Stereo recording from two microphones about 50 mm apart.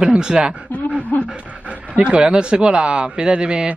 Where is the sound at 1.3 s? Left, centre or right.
Right.